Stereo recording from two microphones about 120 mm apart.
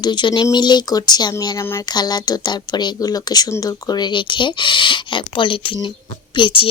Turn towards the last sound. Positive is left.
turn(degrees=45)  # may be behind; listen again after turning